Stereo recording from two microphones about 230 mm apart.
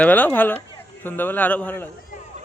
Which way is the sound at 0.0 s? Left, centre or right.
Centre.